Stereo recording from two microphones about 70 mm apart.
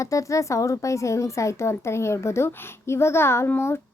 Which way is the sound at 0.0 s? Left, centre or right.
Left.